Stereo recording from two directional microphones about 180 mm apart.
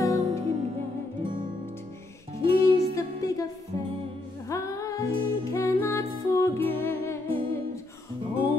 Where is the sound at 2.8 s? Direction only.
20° left (ahead or behind).